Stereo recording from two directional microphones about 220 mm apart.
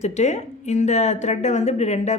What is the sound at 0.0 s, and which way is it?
Speech, 30° left (ahead or behind).